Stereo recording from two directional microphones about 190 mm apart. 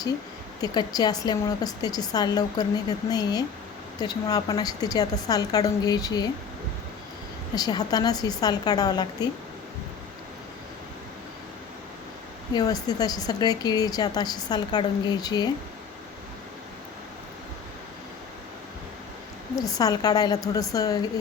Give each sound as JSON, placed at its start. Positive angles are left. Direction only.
{"t": 0.6, "sound": "a woman's voice", "side_deg": 20}
{"t": 7.5, "sound": "a woman's voice", "side_deg": 20}
{"t": 12.5, "sound": "a woman's voice", "side_deg": 20}
{"t": 19.5, "sound": "a woman's voice", "side_deg": 20}